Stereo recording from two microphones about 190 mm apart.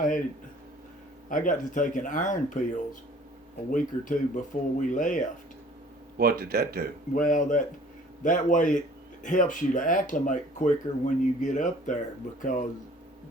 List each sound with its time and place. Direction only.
1.3 s speech: 45° left (ahead or behind)
3.7 s speech: 45° left (ahead or behind)
6.1 s speech: 50° right (ahead or behind)
7.1 s speech: 45° left (ahead or behind)